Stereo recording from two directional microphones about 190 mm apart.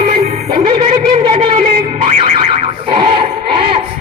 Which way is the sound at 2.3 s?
25° right (ahead or behind).